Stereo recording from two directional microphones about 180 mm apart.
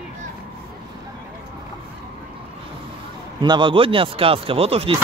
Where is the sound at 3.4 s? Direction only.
25° right (ahead or behind).